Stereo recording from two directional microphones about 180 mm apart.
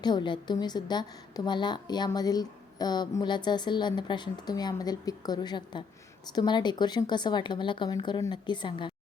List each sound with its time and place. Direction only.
0.0 s a woman's voice: 25° left (ahead or behind)